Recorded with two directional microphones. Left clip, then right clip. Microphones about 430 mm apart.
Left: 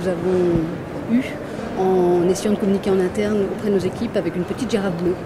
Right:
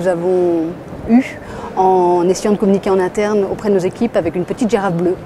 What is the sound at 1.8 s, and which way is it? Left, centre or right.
Speech, right.